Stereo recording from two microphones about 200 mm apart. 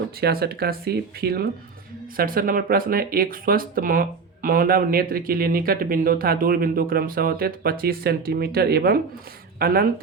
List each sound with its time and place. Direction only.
0.2 s speech: 50° right (ahead or behind)